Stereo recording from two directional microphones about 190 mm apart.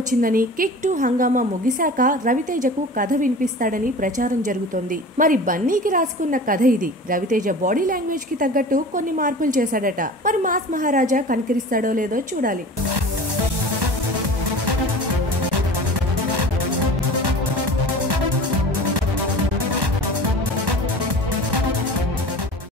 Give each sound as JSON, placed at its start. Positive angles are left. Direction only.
{"t": 0.2, "sound": "a woman's voice", "side_deg": -50}